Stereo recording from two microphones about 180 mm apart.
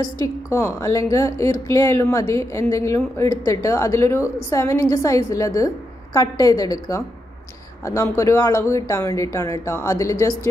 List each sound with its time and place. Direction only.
0.0 s a woman's voice: 20° left (ahead or behind)